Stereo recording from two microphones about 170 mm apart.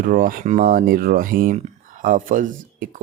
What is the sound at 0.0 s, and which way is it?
Speech, 55° right (ahead or behind).